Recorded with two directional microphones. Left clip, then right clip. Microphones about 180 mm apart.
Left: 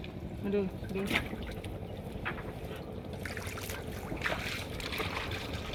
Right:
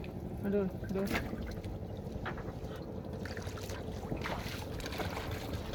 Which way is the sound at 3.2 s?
35° right (ahead or behind).